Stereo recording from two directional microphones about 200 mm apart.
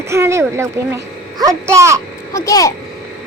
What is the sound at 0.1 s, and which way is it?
Speech, 15° right (ahead or behind).